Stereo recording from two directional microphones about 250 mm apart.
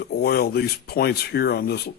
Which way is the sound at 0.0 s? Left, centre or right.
Left.